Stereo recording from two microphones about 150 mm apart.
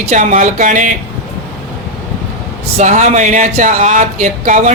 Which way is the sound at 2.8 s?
50° right (ahead or behind).